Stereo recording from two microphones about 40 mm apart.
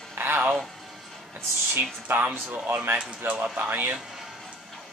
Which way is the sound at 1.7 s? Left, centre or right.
Right.